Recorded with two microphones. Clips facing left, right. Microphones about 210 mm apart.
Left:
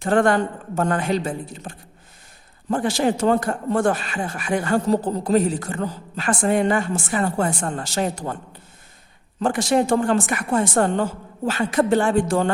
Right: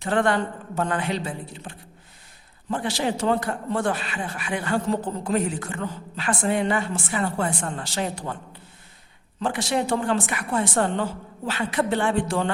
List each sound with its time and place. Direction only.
0.0 s speech: 45° left (ahead or behind)
9.4 s speech: 45° left (ahead or behind)